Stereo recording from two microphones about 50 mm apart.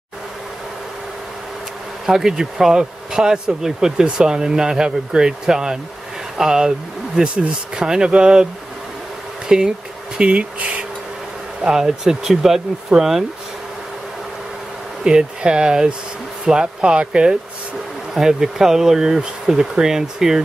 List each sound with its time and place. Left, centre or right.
2.0 s speech: centre
9.5 s speech: centre
11.6 s speech: centre
15.0 s speech: centre